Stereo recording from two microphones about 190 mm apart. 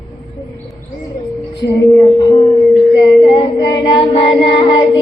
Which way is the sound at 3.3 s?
25° left (ahead or behind).